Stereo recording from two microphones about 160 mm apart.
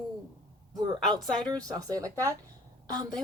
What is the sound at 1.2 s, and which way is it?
Speech, 5° left (ahead or behind).